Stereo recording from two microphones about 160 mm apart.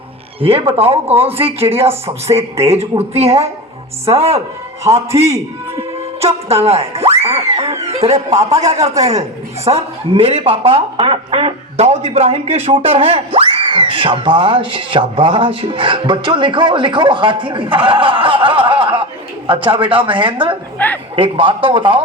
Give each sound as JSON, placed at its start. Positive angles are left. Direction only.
{"t": 0.3, "sound": "speech", "side_deg": -35}
{"t": 6.1, "sound": "speech", "side_deg": -40}
{"t": 7.2, "sound": "a sound", "side_deg": -40}
{"t": 7.9, "sound": "a man's voice", "side_deg": -40}
{"t": 20.7, "sound": "a sound", "side_deg": 10}
{"t": 21.2, "sound": "speech", "side_deg": -35}